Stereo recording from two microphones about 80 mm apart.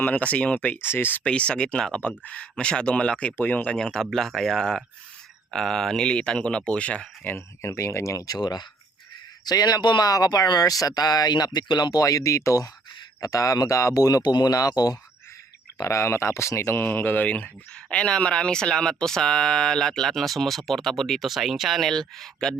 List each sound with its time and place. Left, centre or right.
0.0 s speech: centre
2.0 s speech: centre
7.3 s speech: left
8.4 s speech: left
10.1 s speech: left
14.2 s speech: left
15.8 s speech: left; by 22.5 s centre